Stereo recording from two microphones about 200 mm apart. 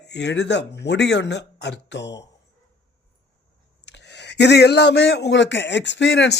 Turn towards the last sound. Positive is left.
turn(degrees=60)  # may be behind; listen again after turning